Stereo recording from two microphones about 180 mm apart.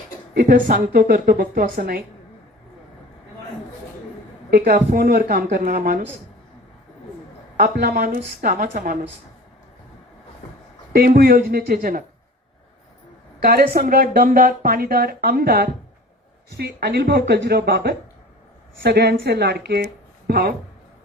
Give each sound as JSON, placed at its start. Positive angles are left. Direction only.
{"t": 0.3, "sound": "a woman's voice", "side_deg": -50}
{"t": 4.5, "sound": "speech", "side_deg": -55}
{"t": 7.5, "sound": "speech", "side_deg": -65}
{"t": 8.1, "sound": "a woman's voice", "side_deg": -50}
{"t": 10.9, "sound": "speech", "side_deg": -55}
{"t": 13.4, "sound": "a woman's voice", "side_deg": -55}